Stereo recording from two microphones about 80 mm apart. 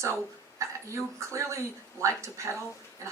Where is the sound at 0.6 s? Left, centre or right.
Right.